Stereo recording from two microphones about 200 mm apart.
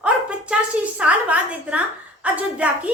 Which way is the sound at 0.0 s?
5° right (ahead or behind).